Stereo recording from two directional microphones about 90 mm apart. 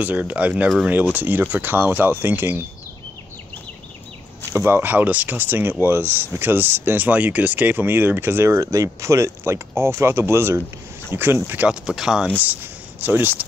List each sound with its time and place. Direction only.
0.0 s speech: 15° right (ahead or behind)
4.5 s speech: 25° right (ahead or behind)
11.7 s speech: 5° right (ahead or behind)
13.0 s speech: 20° right (ahead or behind)